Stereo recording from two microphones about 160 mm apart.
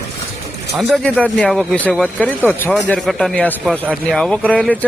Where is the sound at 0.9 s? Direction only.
5° left (ahead or behind).